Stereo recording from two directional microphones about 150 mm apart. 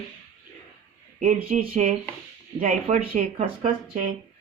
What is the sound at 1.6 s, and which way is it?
Speech, 65° right (ahead or behind).